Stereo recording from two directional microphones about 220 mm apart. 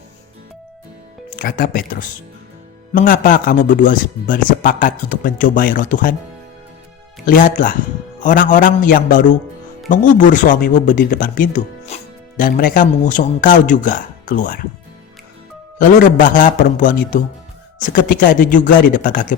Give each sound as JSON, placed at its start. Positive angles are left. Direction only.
{"t": 1.4, "sound": "a man's voice", "side_deg": 40}
{"t": 7.3, "sound": "a man's voice", "side_deg": 40}
{"t": 15.8, "sound": "a man's voice", "side_deg": 35}